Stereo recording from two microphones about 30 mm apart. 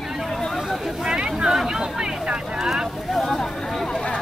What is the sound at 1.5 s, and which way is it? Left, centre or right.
Speech, centre.